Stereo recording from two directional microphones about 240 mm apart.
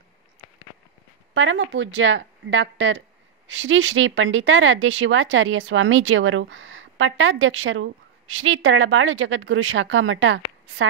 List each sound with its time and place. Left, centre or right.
1.3 s speech: right